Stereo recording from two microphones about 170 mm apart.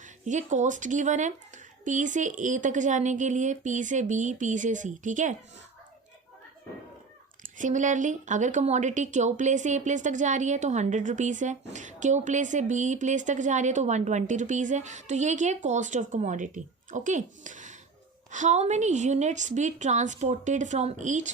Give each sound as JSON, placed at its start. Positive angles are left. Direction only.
{"t": 0.0, "sound": "speech", "side_deg": -45}
{"t": 7.4, "sound": "speech", "side_deg": -50}